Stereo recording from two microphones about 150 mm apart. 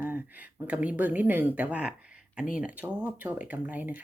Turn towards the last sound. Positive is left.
turn(degrees=-10)  # may be behind; listen again after turning